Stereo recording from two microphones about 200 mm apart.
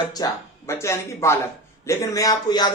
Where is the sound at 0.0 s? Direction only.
20° left (ahead or behind).